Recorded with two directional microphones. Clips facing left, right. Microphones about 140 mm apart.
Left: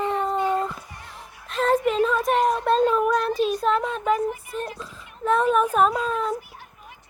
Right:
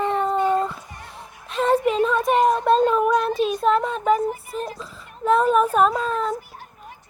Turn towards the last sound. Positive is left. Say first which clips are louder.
# right 1 dB
turn(degrees=0)  # may be behind; listen again after turning